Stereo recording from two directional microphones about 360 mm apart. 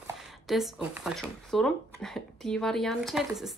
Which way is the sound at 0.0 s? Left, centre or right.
Centre.